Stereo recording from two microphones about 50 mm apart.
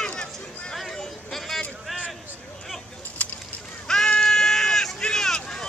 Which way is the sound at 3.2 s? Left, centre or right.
Left.